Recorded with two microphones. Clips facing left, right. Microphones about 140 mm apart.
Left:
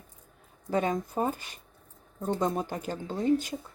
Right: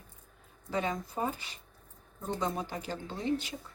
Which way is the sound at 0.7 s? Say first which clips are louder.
Left 5 dB; 45° left (ahead or behind).